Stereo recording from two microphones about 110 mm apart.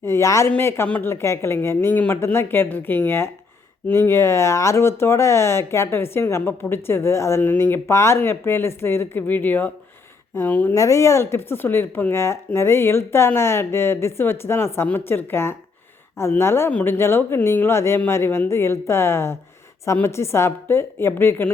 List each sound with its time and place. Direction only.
0.0 s speech: 25° left (ahead or behind)
1.1 s speech: 25° left (ahead or behind)
10.8 s speech: 25° left (ahead or behind)